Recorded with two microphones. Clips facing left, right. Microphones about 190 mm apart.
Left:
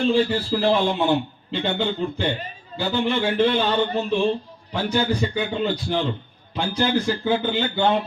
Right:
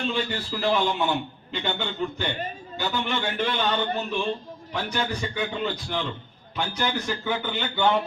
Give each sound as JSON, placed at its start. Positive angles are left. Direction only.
{"t": 0.0, "sound": "a man's voice", "side_deg": 30}